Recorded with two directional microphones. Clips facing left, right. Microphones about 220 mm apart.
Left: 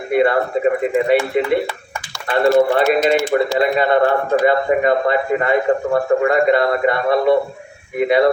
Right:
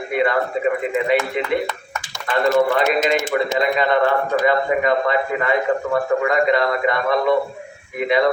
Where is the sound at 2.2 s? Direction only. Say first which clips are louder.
Left 3 dB; 25° left (ahead or behind).